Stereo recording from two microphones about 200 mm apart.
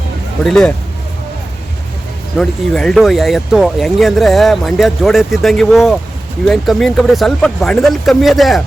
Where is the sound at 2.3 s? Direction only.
5° left (ahead or behind).